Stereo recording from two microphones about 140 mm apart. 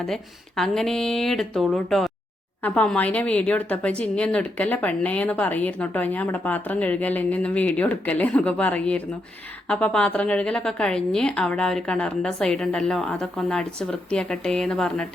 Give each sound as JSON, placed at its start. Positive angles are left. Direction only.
{"t": 0.1, "sound": "a woman's voice", "side_deg": 5}